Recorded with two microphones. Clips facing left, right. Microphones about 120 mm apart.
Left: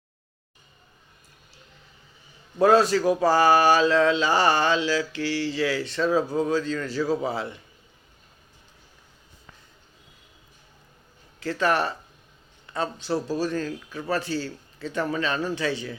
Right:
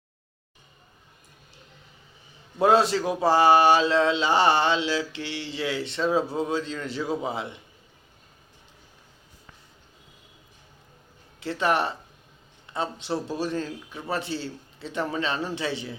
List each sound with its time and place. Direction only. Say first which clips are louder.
2.6 s speech: left 2 dB; 25° right (ahead or behind)
11.3 s speech: left 1 dB; 25° right (ahead or behind)